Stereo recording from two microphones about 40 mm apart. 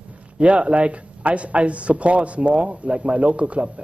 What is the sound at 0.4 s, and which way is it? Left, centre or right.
A man's voice, right.